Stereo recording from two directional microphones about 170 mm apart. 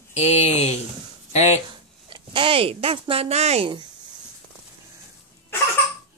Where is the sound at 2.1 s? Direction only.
30° right (ahead or behind).